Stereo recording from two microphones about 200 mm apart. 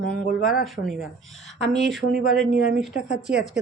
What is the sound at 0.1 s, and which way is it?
Speech, 45° left (ahead or behind).